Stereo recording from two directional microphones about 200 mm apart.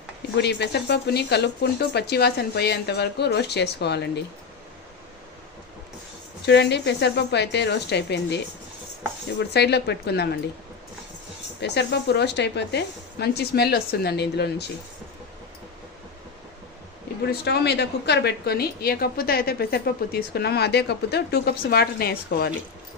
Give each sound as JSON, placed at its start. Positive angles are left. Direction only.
{"t": 0.4, "sound": "speech", "side_deg": 55}
{"t": 6.4, "sound": "speech", "side_deg": 55}
{"t": 9.4, "sound": "speech", "side_deg": 55}
{"t": 11.6, "sound": "speech", "side_deg": 55}
{"t": 17.3, "sound": "a woman's voice", "side_deg": 55}